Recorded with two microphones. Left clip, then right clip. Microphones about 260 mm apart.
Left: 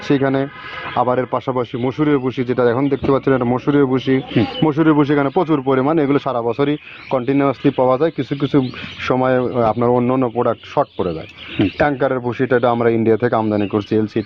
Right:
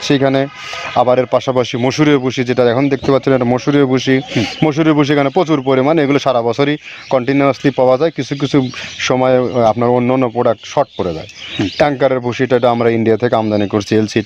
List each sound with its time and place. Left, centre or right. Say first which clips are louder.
0.0 s speech: right 4 dB; right